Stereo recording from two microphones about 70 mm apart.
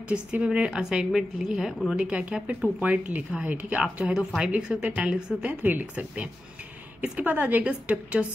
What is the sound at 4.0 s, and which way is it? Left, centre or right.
A woman's voice, centre.